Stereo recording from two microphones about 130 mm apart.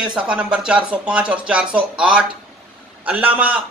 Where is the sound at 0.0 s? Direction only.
5° right (ahead or behind).